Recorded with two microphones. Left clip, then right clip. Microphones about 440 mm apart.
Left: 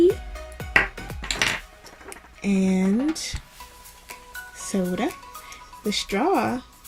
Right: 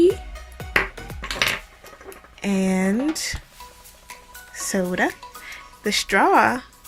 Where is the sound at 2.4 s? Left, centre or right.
Centre.